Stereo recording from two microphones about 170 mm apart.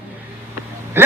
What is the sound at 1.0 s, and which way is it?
Speech, 15° right (ahead or behind).